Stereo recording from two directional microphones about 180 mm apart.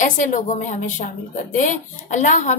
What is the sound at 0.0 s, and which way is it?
A woman's voice, 45° left (ahead or behind).